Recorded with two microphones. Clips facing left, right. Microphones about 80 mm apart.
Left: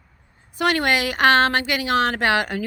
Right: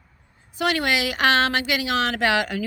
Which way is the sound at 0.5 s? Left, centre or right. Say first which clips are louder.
Left 2 dB; left.